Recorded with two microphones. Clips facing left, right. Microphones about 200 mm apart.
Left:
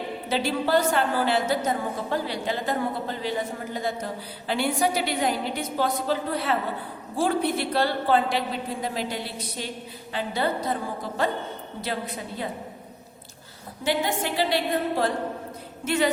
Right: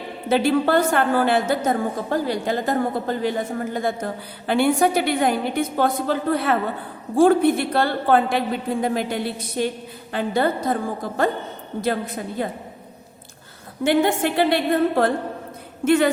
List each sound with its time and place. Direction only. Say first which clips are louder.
0.3 s a woman's voice: right 7 dB; 55° right (ahead or behind)
11.8 s a woman's voice: right 8 dB; 45° right (ahead or behind)
13.8 s a woman's voice: right 7 dB; 55° right (ahead or behind)